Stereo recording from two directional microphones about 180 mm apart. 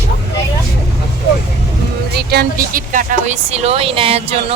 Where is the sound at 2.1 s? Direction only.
60° right (ahead or behind).